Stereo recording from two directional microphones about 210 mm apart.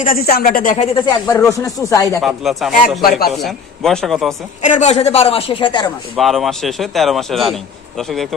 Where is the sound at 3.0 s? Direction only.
45° left (ahead or behind).